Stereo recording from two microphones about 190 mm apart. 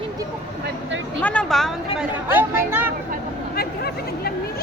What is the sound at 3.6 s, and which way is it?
Chatter, 55° left (ahead or behind).